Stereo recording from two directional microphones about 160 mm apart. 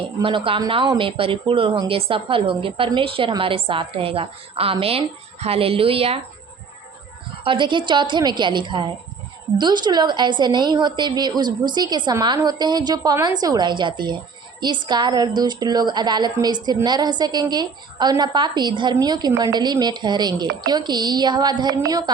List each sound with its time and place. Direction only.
0.2 s speech: 35° right (ahead or behind)
7.4 s a woman's voice: 30° right (ahead or behind)